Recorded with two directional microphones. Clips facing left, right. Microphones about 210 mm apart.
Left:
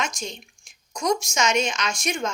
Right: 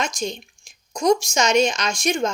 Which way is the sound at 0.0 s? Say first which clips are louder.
Right 5 dB; 35° right (ahead or behind).